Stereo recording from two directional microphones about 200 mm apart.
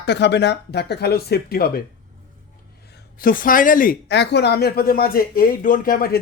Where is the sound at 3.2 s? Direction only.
45° left (ahead or behind).